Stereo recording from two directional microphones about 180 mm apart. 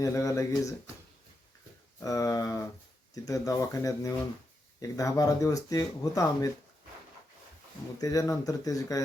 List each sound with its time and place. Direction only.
0.0 s speech: 15° left (ahead or behind)
2.0 s speech: 20° left (ahead or behind)
8.0 s speech: 20° left (ahead or behind)